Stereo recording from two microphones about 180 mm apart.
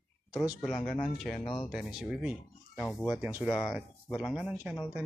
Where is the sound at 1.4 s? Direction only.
25° left (ahead or behind).